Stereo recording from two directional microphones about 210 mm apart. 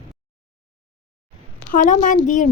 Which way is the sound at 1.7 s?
35° left (ahead or behind).